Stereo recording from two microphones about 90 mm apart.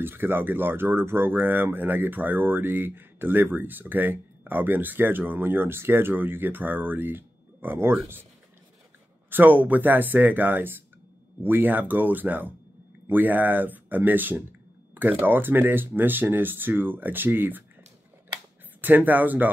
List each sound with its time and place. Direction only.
0.0 s speech: 25° right (ahead or behind)
9.3 s speech: 20° right (ahead or behind)
18.8 s speech: 20° right (ahead or behind)